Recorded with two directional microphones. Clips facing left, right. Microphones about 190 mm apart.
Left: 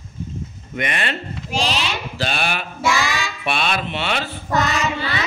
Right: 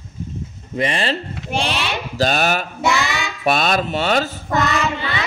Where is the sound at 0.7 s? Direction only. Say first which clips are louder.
Right 4 dB; 30° right (ahead or behind).